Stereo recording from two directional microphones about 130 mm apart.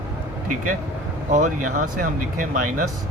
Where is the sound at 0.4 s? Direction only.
90° right.